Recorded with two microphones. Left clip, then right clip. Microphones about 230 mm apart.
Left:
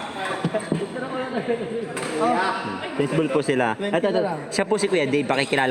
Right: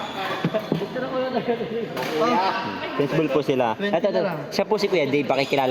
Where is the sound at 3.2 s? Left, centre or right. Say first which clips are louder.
Even; left.